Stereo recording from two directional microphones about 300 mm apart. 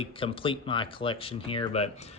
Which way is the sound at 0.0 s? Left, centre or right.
Centre.